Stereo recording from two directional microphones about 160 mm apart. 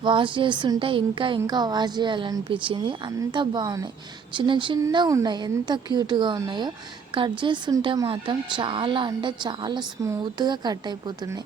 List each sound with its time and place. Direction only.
0.0 s speech: 30° right (ahead or behind)